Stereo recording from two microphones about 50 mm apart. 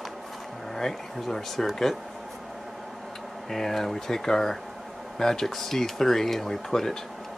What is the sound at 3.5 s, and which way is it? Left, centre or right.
Speech, centre.